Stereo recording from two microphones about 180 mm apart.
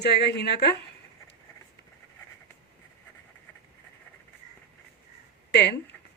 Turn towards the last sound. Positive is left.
turn(degrees=70)  # may be behind; listen again after turning